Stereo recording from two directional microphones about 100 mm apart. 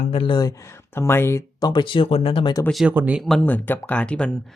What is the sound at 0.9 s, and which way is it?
Speech, 25° left (ahead or behind).